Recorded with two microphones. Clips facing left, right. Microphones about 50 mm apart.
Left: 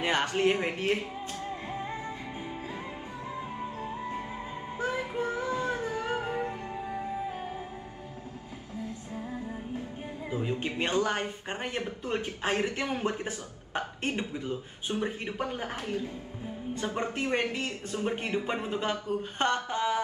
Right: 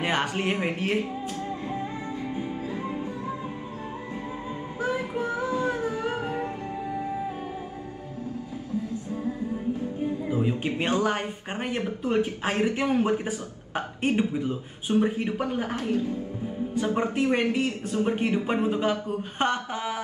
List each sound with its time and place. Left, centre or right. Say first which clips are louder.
0.0 s speech: even; right
5.2 s child singing: right 3 dB; right
5.6 s music: right 4 dB; right
10.3 s music: right 2 dB; centre
10.8 s speech: right 2 dB; right
16.8 s a man's voice: right 6 dB; centre